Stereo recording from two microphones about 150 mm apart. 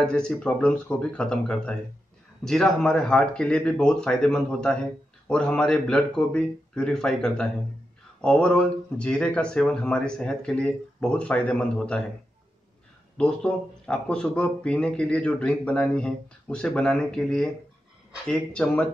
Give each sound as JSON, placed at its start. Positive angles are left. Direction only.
{"t": 0.0, "sound": "speech", "side_deg": 5}
{"t": 13.2, "sound": "speech", "side_deg": 5}